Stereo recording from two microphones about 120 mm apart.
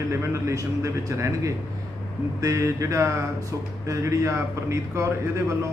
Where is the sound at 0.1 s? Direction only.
25° right (ahead or behind).